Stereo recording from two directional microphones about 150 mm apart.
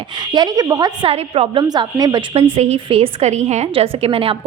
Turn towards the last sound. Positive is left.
turn(degrees=-40)  # may be behind; listen again after turning